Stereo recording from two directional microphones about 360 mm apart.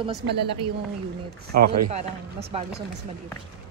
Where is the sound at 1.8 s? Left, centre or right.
Centre.